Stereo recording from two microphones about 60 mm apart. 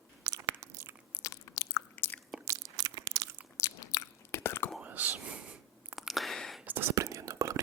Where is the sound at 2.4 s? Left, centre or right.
Right.